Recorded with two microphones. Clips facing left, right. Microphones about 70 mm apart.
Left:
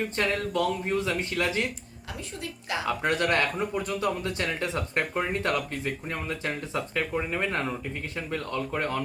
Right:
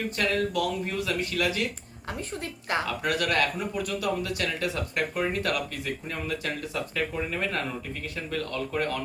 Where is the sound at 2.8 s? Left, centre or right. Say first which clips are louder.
Left 7 dB; left.